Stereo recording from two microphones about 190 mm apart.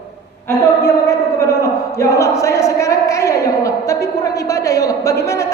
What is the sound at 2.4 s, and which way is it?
A woman's voice, 15° left (ahead or behind).